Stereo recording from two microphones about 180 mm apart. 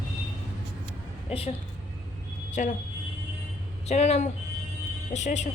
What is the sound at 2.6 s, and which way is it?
Speech, 45° left (ahead or behind).